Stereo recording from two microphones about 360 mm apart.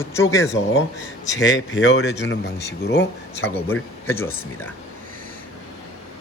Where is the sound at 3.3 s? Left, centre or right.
Centre.